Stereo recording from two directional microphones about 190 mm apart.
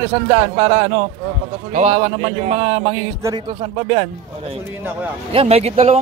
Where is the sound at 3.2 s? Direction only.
20° right (ahead or behind).